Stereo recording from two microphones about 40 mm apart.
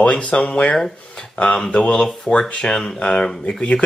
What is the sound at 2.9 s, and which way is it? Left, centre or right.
Speech, left.